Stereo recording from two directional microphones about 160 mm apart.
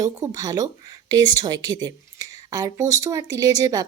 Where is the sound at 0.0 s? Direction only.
20° right (ahead or behind).